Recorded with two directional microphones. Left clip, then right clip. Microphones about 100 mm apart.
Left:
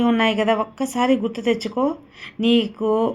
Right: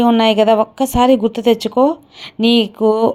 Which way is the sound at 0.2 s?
45° right (ahead or behind).